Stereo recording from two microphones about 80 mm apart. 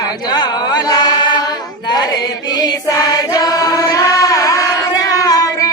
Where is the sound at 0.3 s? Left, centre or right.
Left.